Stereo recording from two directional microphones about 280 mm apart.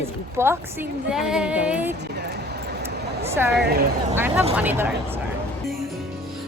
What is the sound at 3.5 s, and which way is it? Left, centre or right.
Speech, right.